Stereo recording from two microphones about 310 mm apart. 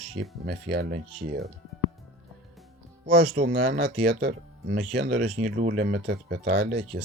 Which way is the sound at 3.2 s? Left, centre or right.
Right.